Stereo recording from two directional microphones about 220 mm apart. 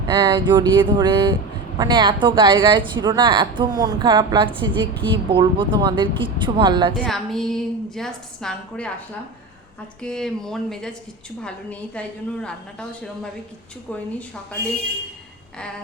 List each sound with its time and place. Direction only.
0.1 s a woman's voice: 20° right (ahead or behind)
6.9 s a woman's voice: centre (ahead or behind)
10.0 s a woman's voice: 5° left (ahead or behind)